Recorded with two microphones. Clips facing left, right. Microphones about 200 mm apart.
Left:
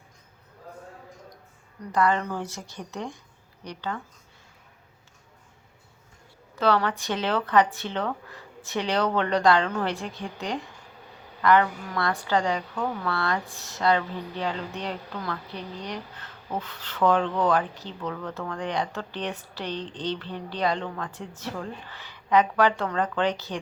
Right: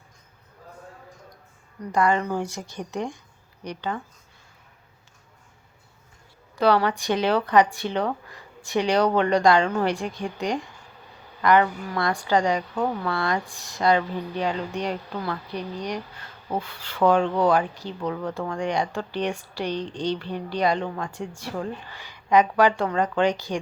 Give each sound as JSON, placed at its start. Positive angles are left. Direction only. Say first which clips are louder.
{"t": 1.9, "sound": "speech", "louder": "right 2 dB", "side_deg": -15}
{"t": 6.6, "sound": "speech", "louder": "right 3 dB", "side_deg": -15}